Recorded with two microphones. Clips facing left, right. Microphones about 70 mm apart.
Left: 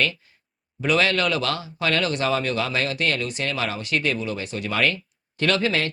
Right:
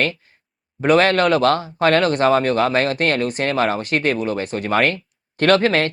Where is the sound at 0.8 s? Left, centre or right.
Right.